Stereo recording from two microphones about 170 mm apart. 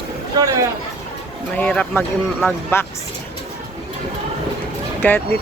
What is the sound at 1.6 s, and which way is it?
Speech, 10° left (ahead or behind).